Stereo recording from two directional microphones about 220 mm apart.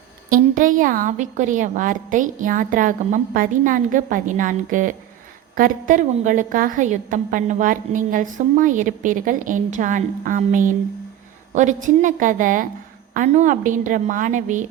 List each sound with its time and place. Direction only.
0.3 s a woman's voice: 35° right (ahead or behind)